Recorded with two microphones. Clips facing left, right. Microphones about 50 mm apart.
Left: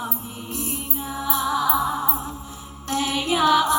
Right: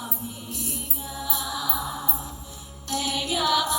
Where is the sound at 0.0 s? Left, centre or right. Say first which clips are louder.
Left 4 dB; left.